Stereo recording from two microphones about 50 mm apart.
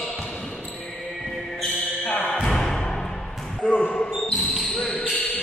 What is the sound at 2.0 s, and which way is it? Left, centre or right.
Music, left.